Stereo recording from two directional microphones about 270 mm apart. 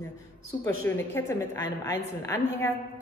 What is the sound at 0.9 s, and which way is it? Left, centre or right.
A woman's voice, centre.